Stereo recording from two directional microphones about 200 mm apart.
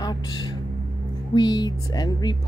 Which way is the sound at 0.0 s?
20° left (ahead or behind).